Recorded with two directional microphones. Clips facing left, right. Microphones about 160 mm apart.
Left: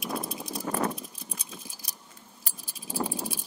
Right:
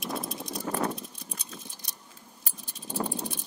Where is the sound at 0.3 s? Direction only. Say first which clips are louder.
Even; 5° left (ahead or behind).